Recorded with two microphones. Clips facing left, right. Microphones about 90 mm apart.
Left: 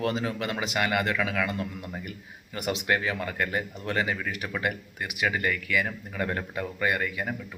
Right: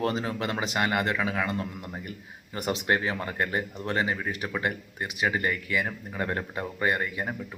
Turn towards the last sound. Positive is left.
turn(degrees=-25)  # may be behind; listen again after turning